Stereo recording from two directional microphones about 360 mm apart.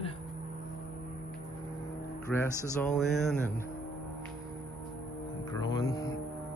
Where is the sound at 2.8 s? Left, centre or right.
Centre.